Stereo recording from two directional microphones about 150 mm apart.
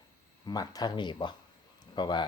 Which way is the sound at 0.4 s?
25° left (ahead or behind).